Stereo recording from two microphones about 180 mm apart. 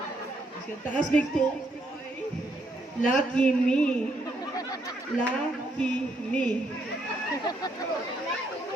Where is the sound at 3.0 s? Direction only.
5° left (ahead or behind).